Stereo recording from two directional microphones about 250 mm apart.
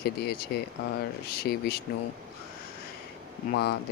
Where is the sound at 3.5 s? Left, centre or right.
Left.